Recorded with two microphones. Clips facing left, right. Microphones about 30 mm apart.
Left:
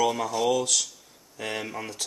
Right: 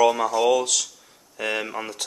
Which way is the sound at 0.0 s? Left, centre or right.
Centre.